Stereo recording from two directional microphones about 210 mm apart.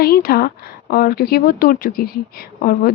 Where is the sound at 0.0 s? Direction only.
45° left (ahead or behind).